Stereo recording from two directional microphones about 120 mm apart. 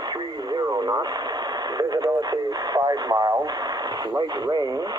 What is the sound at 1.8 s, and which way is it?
Radio, 35° right (ahead or behind).